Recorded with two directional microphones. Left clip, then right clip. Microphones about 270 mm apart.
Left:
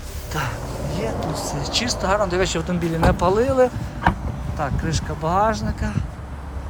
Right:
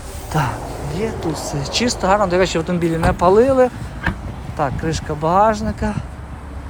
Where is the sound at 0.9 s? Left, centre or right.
Centre.